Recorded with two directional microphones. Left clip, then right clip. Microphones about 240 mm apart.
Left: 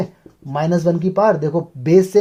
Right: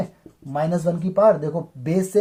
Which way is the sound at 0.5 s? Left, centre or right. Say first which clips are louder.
Left 5 dB; left.